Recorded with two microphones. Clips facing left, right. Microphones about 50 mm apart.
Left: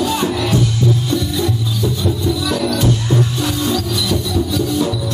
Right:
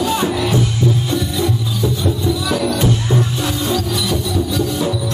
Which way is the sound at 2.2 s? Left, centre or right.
Centre.